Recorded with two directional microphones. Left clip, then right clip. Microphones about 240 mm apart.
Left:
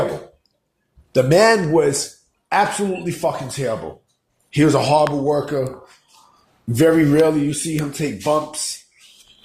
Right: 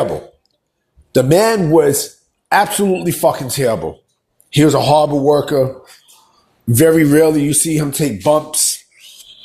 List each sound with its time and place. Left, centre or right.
1.1 s a man's voice: right